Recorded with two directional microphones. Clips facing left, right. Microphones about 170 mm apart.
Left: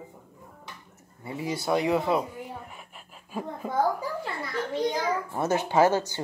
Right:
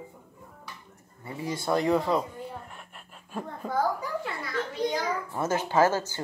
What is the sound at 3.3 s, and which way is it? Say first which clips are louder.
Speech: left 2 dB; 5° left (ahead or behind).